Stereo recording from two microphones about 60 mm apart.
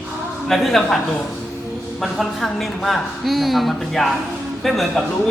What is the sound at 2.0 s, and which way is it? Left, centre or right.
A woman's voice, centre.